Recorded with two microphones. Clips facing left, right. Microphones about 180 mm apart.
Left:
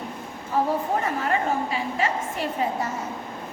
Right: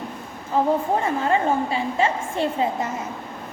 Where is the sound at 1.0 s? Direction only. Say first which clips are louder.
Right 4 dB; 25° right (ahead or behind).